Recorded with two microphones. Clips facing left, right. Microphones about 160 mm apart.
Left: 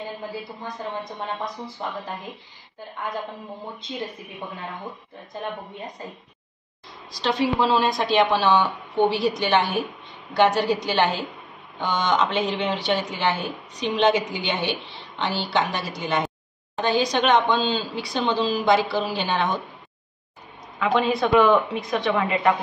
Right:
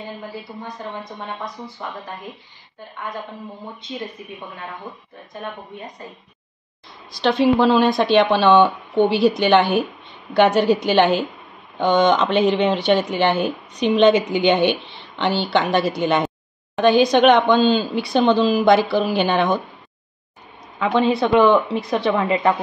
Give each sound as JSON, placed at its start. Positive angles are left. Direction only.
{"t": 7.2, "sound": "a woman's voice", "side_deg": -60}
{"t": 21.1, "sound": "speech", "side_deg": -30}